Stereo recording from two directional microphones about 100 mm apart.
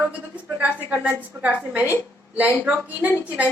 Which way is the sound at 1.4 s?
15° right (ahead or behind).